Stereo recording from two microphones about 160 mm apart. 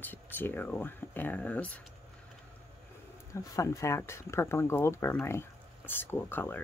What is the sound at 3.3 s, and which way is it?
Speech, 20° left (ahead or behind).